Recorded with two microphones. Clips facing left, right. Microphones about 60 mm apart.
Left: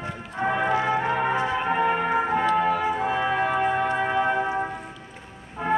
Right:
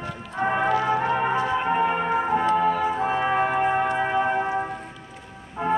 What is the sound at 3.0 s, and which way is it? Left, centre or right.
Music, right.